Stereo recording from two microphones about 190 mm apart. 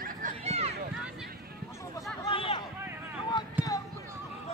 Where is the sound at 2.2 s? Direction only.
30° left (ahead or behind).